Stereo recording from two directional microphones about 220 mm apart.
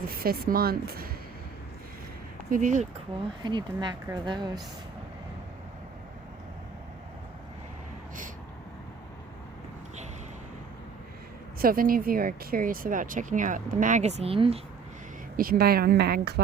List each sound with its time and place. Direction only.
0.1 s speech: 40° right (ahead or behind)
2.5 s speech: 35° right (ahead or behind)
11.6 s speech: 40° right (ahead or behind)
15.4 s speech: 40° right (ahead or behind)